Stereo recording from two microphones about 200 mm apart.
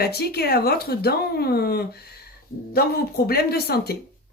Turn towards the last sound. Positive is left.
turn(degrees=50)  # may be behind; listen again after turning